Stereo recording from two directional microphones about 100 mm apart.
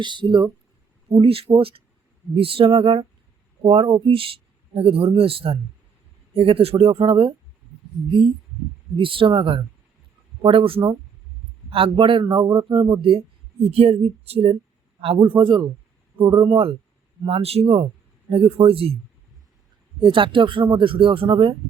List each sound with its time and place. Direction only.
0.0 s speech: 50° right (ahead or behind)
1.1 s speech: 70° right (ahead or behind)
9.0 s speech: 60° right (ahead or behind)
13.7 s speech: 80° right
15.0 s speech: 65° right (ahead or behind)
17.2 s speech: 75° right (ahead or behind)
18.3 s speech: 70° right (ahead or behind)
20.0 s speech: 60° right (ahead or behind)